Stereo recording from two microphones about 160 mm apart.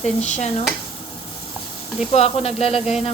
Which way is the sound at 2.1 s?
40° left (ahead or behind).